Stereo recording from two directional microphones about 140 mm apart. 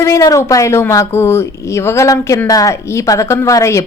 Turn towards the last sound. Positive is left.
turn(degrees=20)  # may be behind; listen again after turning